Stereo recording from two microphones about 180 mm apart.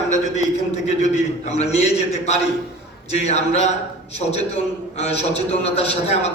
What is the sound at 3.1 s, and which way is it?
Speech, 40° left (ahead or behind).